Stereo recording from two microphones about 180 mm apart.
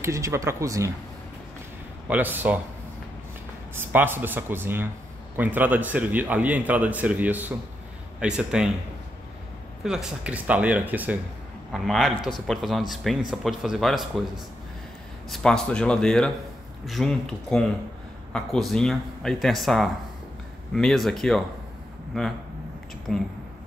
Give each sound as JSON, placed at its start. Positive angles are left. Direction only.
{"t": 0.0, "sound": "a man's voice", "side_deg": -15}
{"t": 2.0, "sound": "a man's voice", "side_deg": -10}
{"t": 3.7, "sound": "a man's voice", "side_deg": -10}
{"t": 9.8, "sound": "a man's voice", "side_deg": -5}
{"t": 15.2, "sound": "speech", "side_deg": 0}
{"t": 23.1, "sound": "speech", "side_deg": 0}